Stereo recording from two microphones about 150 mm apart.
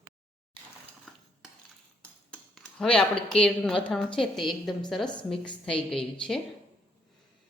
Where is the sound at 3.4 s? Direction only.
5° left (ahead or behind).